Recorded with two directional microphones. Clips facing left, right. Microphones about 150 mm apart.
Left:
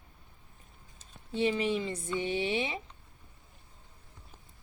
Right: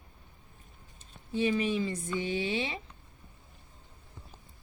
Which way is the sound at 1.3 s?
25° left (ahead or behind).